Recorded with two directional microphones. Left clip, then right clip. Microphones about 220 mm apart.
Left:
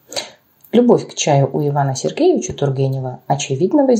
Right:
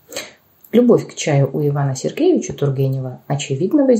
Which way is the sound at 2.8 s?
50° left (ahead or behind).